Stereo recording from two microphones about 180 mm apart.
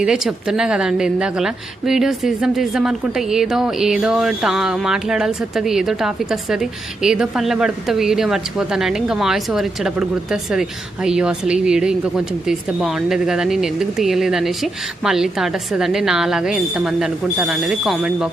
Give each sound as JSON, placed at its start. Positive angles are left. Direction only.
{"t": 0.0, "sound": "speech", "side_deg": 0}